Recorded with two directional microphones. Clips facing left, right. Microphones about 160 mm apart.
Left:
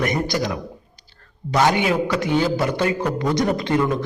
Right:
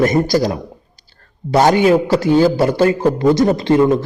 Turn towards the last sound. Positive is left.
turn(degrees=-30)  # may be behind; listen again after turning